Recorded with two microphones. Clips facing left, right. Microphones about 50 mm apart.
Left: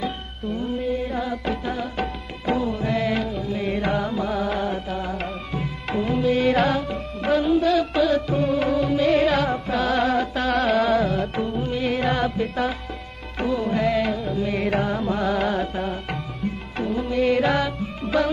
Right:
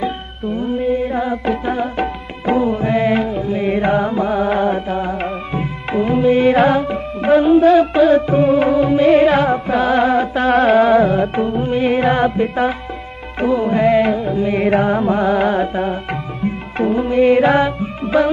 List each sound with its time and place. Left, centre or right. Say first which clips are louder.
0.0 s music: right 7 dB; right